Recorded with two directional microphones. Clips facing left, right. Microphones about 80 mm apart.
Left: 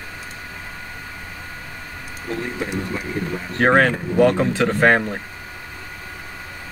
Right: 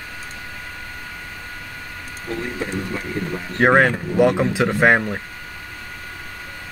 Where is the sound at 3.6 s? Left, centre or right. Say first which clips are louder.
Right 1 dB; centre.